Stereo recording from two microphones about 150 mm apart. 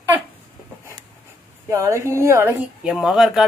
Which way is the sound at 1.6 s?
20° right (ahead or behind).